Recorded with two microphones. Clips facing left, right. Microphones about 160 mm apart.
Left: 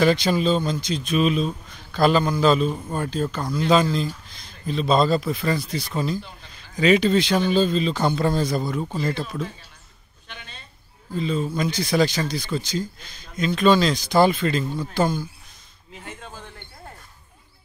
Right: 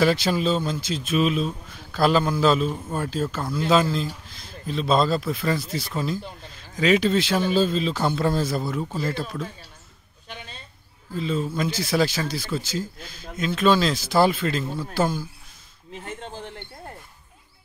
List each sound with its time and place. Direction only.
0.0 s speech: 5° right (ahead or behind)
11.1 s speech: centre (ahead or behind)
16.2 s speech: 25° right (ahead or behind)